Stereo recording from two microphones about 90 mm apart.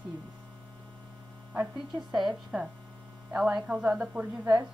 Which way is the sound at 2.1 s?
5° right (ahead or behind).